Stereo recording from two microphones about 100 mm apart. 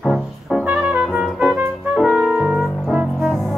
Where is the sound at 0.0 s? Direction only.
Centre (ahead or behind).